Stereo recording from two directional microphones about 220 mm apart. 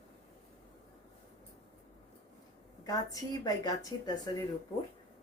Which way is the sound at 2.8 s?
15° left (ahead or behind).